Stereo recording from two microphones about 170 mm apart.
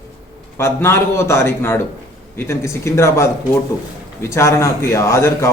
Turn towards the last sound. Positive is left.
turn(degrees=15)  # may be behind; listen again after turning